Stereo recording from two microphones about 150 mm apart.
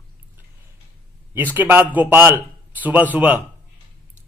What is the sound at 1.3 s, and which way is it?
A man's voice, 15° right (ahead or behind).